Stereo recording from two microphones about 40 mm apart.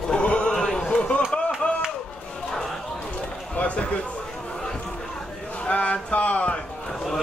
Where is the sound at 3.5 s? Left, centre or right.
Left.